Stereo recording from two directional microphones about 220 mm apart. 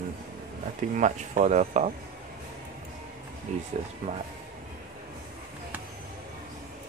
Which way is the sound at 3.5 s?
35° right (ahead or behind).